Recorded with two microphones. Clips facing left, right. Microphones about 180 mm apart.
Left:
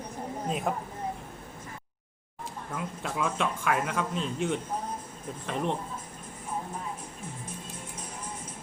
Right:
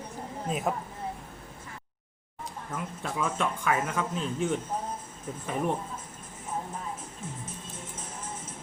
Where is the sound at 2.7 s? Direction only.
10° left (ahead or behind).